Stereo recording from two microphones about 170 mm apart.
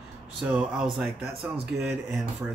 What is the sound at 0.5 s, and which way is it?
Speech, 5° right (ahead or behind).